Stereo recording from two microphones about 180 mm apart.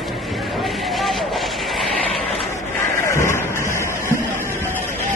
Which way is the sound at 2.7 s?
15° left (ahead or behind).